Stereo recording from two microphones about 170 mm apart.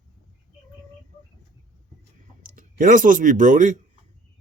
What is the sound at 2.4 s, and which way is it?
Speech, 50° right (ahead or behind).